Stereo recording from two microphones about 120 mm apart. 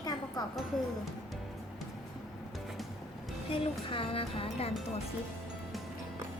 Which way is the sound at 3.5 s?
50° left (ahead or behind).